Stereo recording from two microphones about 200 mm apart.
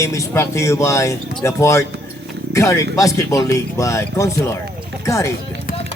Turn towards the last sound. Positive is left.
turn(degrees=15)  # may be behind; listen again after turning